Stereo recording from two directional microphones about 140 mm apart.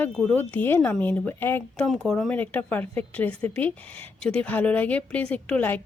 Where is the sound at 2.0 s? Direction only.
5° left (ahead or behind).